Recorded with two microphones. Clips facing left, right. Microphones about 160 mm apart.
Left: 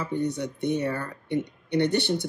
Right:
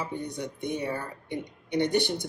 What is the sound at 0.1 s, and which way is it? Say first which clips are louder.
Speech: left 6 dB; 65° left (ahead or behind).